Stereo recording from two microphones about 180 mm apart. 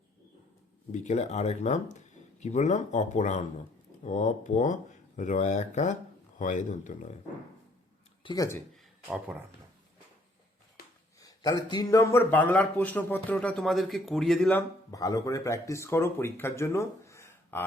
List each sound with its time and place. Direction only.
1.0 s speech: 40° left (ahead or behind)
8.2 s speech: 20° left (ahead or behind)
9.0 s speech: 5° right (ahead or behind)
11.2 s a man's voice: 20° left (ahead or behind); by 14.6 s 5° left (ahead or behind)
14.8 s speech: 20° left (ahead or behind)